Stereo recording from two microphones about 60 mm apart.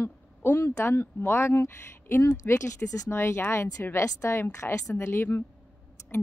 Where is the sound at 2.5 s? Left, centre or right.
Left.